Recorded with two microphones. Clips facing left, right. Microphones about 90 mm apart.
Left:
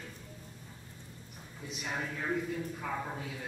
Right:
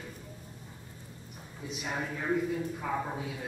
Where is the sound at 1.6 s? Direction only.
10° right (ahead or behind).